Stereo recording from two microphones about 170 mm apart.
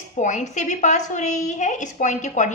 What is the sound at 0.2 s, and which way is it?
A woman's voice, 45° left (ahead or behind).